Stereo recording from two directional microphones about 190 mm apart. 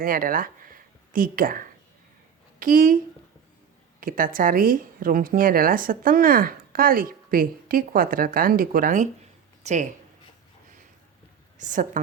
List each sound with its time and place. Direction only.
0.0 s speech: 50° right (ahead or behind)
4.0 s speech: 45° right (ahead or behind)
11.5 s a woman's voice: 40° right (ahead or behind)